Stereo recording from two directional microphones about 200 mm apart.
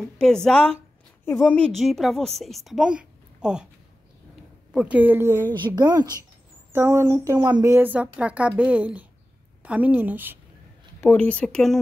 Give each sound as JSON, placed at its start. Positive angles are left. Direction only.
{"t": 0.2, "sound": "a woman's voice", "side_deg": 5}
{"t": 4.7, "sound": "a woman's voice", "side_deg": -5}
{"t": 11.0, "sound": "speech", "side_deg": 10}